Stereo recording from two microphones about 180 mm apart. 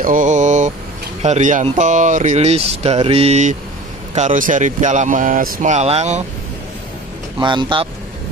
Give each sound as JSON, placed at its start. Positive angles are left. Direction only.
{"t": 0.0, "sound": "mantra", "side_deg": -45}
{"t": 1.2, "sound": "speech", "side_deg": -40}
{"t": 7.3, "sound": "speech", "side_deg": -25}